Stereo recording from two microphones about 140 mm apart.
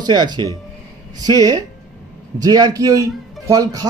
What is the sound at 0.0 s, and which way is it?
Speech, 30° right (ahead or behind).